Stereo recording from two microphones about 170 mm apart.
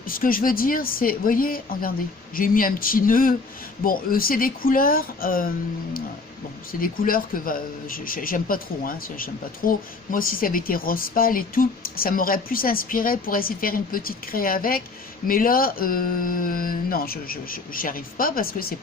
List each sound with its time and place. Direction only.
0.0 s speech: 55° left (ahead or behind)
6.7 s speech: 55° left (ahead or behind)